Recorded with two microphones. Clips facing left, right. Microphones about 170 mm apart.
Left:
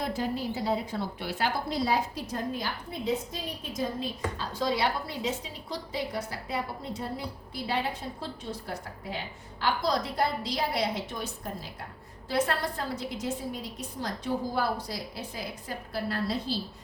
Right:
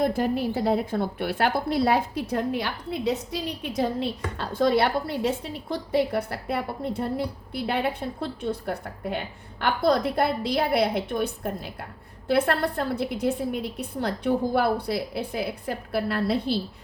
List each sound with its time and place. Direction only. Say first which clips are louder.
0.0 s a woman's voice: right 7 dB; 55° right (ahead or behind)